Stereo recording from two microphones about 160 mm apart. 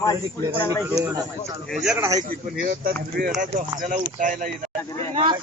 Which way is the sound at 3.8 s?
55° right (ahead or behind).